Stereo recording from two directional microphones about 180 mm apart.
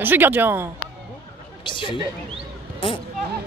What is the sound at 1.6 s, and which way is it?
Speech, 25° left (ahead or behind).